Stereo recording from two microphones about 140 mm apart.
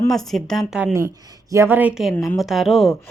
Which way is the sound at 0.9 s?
20° right (ahead or behind).